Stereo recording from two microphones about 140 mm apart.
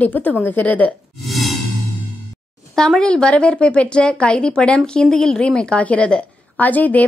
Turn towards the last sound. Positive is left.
turn(degrees=10)  # may be behind; listen again after turning